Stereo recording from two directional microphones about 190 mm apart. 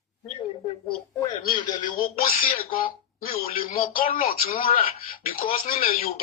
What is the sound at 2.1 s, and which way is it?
Speech, 50° left (ahead or behind).